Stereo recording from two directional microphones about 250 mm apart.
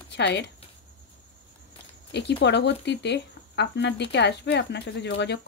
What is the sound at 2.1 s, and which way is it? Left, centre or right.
A woman's voice, left.